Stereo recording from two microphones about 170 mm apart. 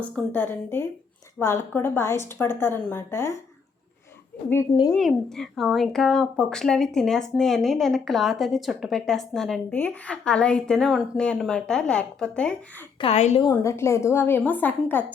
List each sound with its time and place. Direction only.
0.3 s a woman's voice: 10° left (ahead or behind)
4.9 s speech: centre (ahead or behind)
13.0 s a woman's voice: 40° left (ahead or behind)
13.5 s a woman's voice: 15° left (ahead or behind)